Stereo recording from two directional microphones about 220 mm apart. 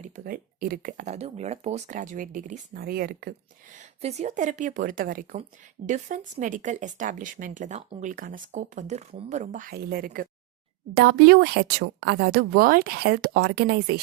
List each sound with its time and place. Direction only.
0.0 s speech: 40° right (ahead or behind)
3.8 s speech: 30° right (ahead or behind)